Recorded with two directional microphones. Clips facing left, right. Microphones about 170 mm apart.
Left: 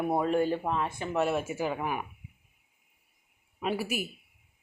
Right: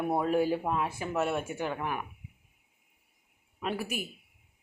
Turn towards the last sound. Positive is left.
turn(degrees=5)  # may be behind; listen again after turning